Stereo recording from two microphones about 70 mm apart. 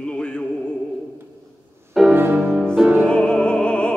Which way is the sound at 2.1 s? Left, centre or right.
Right.